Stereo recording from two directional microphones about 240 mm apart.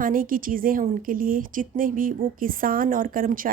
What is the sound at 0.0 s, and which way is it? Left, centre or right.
A woman's voice, right.